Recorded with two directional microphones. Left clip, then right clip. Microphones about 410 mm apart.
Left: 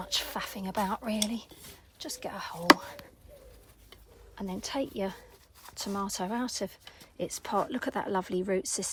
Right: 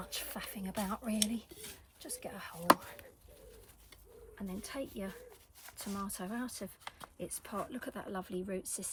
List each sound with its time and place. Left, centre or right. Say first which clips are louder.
0.0 s speech: left 10 dB; centre
4.4 s speech: left 9 dB; centre